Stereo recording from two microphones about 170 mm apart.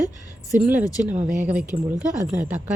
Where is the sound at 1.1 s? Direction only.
45° right (ahead or behind).